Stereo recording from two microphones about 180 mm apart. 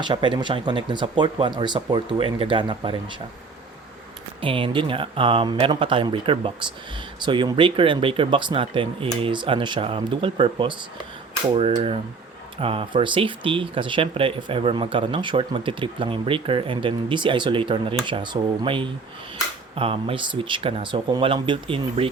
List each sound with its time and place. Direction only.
0.0 s speech: 25° right (ahead or behind)
4.4 s speech: 30° right (ahead or behind)